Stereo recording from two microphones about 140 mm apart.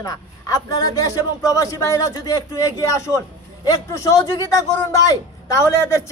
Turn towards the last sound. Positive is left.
turn(degrees=20)  # may be behind; listen again after turning